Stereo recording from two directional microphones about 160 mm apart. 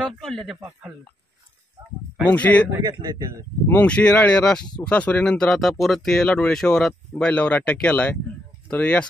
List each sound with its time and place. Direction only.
0.0 s speech: centre (ahead or behind)
2.2 s speech: 10° left (ahead or behind)
2.7 s speech: 25° right (ahead or behind)
3.6 s speech: 10° left (ahead or behind)